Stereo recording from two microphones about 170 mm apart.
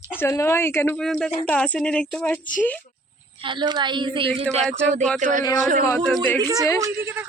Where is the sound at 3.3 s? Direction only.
30° right (ahead or behind).